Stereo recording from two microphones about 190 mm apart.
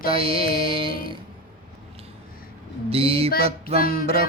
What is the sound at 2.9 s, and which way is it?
Mantra, 30° right (ahead or behind).